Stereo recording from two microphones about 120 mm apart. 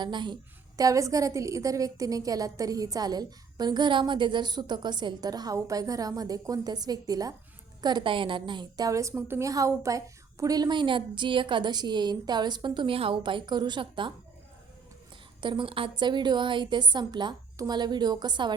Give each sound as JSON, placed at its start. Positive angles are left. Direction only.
{"t": 0.0, "sound": "a woman's voice", "side_deg": -40}
{"t": 0.8, "sound": "a woman's voice", "side_deg": -30}
{"t": 15.4, "sound": "a woman's voice", "side_deg": -40}